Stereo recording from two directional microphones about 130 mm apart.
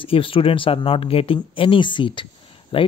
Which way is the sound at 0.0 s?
45° left (ahead or behind).